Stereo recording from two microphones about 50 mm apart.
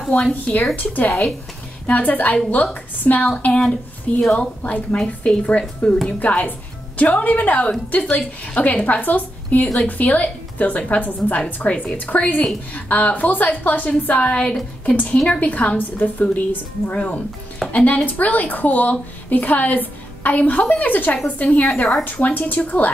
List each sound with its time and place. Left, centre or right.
0.3 s a woman's voice: left